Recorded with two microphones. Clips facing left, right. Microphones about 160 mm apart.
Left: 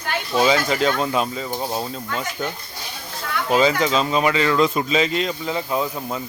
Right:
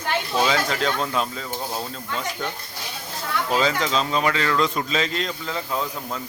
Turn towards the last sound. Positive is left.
turn(degrees=15)  # may be behind; listen again after turning